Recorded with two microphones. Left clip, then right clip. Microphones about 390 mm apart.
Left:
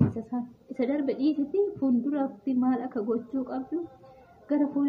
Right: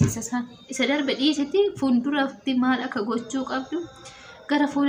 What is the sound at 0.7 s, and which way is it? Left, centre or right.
Speech, left.